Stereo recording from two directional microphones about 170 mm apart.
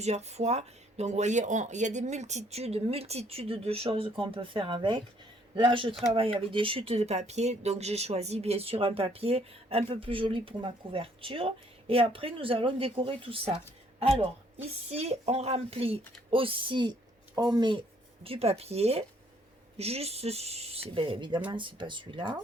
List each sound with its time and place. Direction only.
0.0 s speech: 40° right (ahead or behind)